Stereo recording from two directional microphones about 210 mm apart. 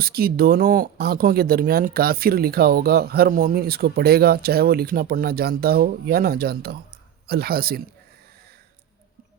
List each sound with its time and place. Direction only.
0.0 s speech: 45° right (ahead or behind)